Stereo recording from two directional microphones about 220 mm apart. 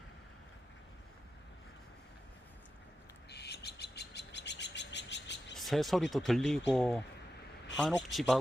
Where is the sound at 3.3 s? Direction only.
50° left (ahead or behind).